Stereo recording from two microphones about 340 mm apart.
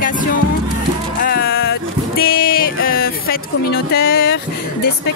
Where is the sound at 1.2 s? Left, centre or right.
Left.